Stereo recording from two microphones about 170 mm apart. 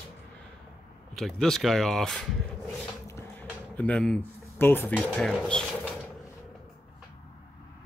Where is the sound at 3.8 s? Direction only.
5° left (ahead or behind).